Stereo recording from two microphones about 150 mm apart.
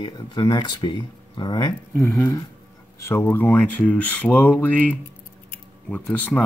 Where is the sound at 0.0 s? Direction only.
30° left (ahead or behind).